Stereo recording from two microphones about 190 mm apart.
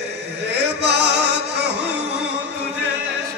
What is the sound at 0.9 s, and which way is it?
Music, 65° right (ahead or behind).